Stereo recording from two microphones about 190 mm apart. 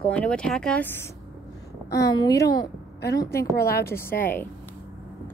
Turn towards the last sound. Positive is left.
turn(degrees=10)  # may be behind; listen again after turning